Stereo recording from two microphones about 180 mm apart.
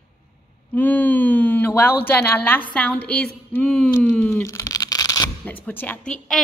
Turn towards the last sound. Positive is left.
turn(degrees=5)  # may be behind; listen again after turning